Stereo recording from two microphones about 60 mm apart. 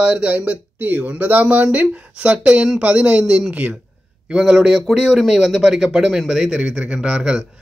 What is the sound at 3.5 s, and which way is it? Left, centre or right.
A man's voice, right.